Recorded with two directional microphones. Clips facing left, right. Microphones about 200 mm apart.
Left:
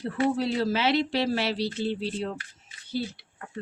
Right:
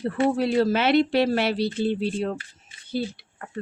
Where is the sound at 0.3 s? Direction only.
55° right (ahead or behind).